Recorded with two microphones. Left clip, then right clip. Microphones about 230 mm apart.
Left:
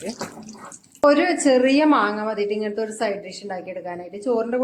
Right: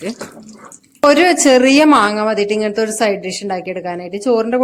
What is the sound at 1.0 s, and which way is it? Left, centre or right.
A woman's voice, right.